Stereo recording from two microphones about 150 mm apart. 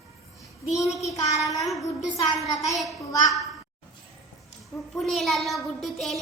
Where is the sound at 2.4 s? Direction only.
20° left (ahead or behind).